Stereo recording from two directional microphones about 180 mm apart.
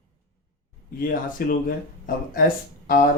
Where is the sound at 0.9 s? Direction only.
55° left (ahead or behind).